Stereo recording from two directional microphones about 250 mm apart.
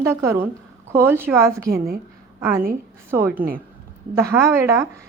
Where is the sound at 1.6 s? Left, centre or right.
Right.